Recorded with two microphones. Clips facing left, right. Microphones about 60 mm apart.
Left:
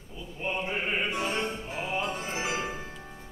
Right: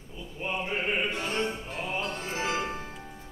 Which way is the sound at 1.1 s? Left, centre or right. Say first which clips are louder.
Even; centre.